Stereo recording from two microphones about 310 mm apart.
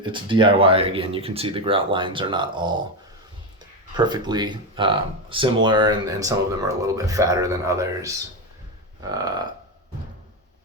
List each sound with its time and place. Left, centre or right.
0.0 s speech: centre
3.9 s speech: centre